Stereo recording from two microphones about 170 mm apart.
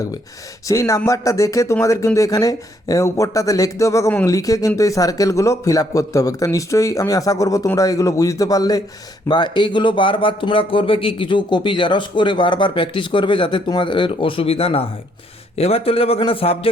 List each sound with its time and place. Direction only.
0.7 s a man's voice: 20° left (ahead or behind); by 16.6 s 35° left (ahead or behind)